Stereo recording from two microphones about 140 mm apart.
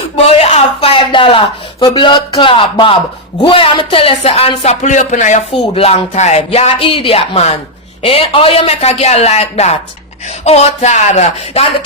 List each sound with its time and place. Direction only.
0.3 s speech: 50° left (ahead or behind)
5.5 s speech: 45° left (ahead or behind)